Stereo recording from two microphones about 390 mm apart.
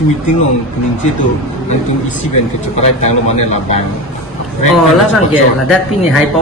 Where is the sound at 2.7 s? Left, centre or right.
Centre.